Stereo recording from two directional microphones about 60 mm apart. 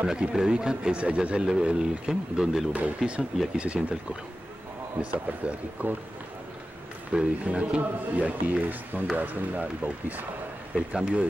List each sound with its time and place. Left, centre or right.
0.0 s speech: centre
3.5 s a man's voice: centre
4.9 s a man's voice: right
7.1 s a man's voice: centre
10.7 s speech: centre